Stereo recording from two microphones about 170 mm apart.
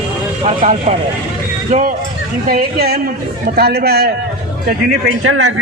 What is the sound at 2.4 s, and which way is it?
A woman's voice, 65° right (ahead or behind).